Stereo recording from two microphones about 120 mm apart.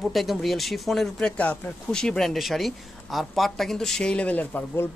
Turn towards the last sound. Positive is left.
turn(degrees=15)  # may be behind; listen again after turning